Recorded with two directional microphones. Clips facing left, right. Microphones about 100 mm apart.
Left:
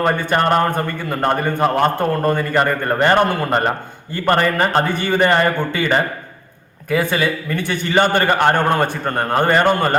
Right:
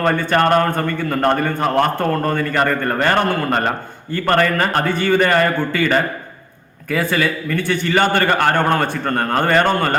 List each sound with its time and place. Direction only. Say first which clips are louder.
0.0 s a man's voice: right 1 dB; 15° left (ahead or behind)